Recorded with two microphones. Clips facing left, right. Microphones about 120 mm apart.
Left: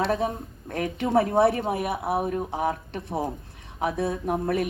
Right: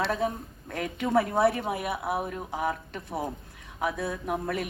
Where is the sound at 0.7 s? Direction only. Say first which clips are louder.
Left 3 dB; 25° left (ahead or behind).